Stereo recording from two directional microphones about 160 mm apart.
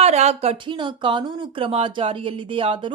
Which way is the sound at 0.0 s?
45° right (ahead or behind).